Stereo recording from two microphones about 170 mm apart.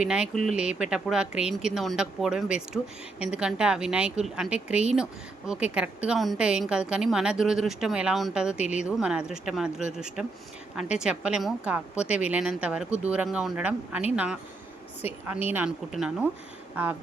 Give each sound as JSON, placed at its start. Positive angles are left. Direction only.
{"t": 0.0, "sound": "a woman's voice", "side_deg": -5}
{"t": 15.3, "sound": "a woman's voice", "side_deg": -10}